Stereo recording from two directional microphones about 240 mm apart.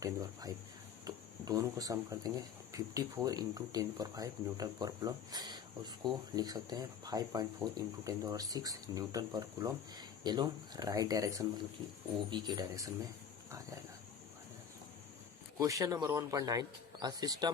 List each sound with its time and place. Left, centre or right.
0.0 s speech: centre
15.5 s speech: centre